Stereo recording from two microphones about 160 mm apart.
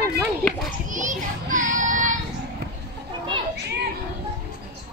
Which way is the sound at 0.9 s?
55° right (ahead or behind).